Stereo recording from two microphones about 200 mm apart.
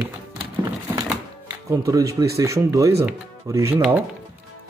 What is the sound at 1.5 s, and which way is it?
Speech, 15° right (ahead or behind).